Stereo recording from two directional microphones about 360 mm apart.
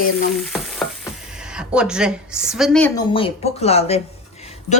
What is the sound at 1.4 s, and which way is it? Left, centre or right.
A woman's voice, centre.